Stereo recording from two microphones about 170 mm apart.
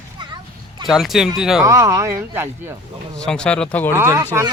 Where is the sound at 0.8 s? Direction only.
Centre (ahead or behind).